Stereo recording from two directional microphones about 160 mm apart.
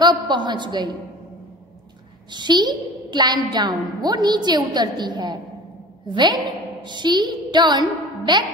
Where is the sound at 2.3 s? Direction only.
25° right (ahead or behind).